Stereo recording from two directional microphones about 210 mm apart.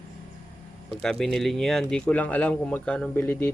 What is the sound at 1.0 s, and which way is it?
Speech, centre (ahead or behind).